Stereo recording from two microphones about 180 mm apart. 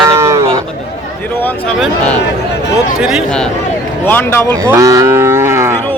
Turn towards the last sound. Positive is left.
turn(degrees=-15)  # may be behind; listen again after turning